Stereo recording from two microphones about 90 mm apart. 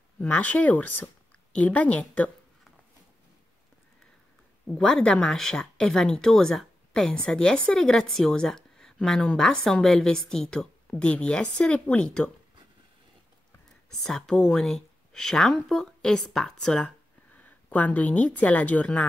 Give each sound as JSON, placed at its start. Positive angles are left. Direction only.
{"t": 0.2, "sound": "a woman's voice", "side_deg": 15}
{"t": 4.6, "sound": "speech", "side_deg": 10}
{"t": 14.0, "sound": "a woman's voice", "side_deg": 5}